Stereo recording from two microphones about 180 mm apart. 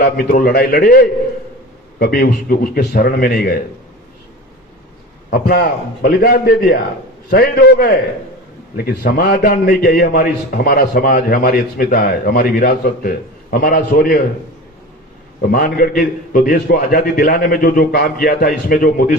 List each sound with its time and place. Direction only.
0.0 s a man's voice: 55° left (ahead or behind)
5.3 s a man's voice: 60° left (ahead or behind)
15.4 s a man's voice: 55° left (ahead or behind)